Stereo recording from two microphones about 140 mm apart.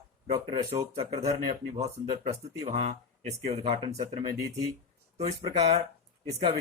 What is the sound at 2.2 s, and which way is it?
Speech, 50° right (ahead or behind).